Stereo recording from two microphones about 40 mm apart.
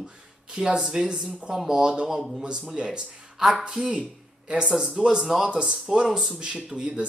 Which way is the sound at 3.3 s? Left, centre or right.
Centre.